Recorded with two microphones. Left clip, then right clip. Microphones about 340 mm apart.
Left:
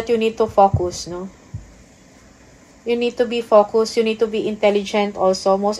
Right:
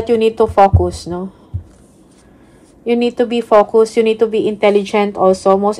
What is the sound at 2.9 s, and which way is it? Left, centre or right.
A woman's voice, right.